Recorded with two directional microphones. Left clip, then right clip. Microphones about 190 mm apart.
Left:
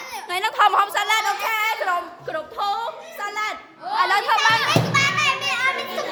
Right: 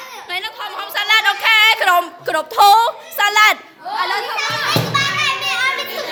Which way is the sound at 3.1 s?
50° right (ahead or behind).